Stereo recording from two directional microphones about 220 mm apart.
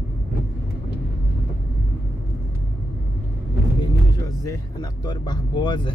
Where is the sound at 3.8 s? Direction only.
15° left (ahead or behind).